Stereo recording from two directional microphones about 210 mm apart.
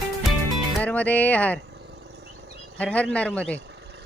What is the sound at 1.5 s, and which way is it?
Insect, 55° right (ahead or behind).